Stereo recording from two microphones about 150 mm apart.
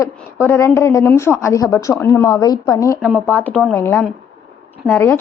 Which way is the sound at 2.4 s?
25° left (ahead or behind).